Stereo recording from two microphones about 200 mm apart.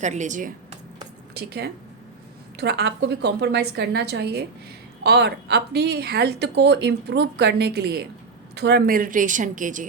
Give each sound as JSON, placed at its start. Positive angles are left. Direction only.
{"t": 0.0, "sound": "speech", "side_deg": -35}
{"t": 1.3, "sound": "a woman's voice", "side_deg": -55}